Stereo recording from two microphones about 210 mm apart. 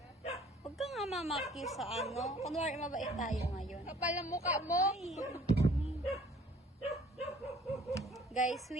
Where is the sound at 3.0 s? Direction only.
Centre (ahead or behind).